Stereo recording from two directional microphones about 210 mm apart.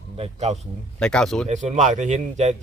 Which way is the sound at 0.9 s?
5° left (ahead or behind).